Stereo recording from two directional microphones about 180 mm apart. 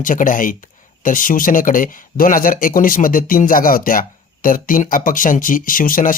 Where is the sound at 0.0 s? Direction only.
45° left (ahead or behind).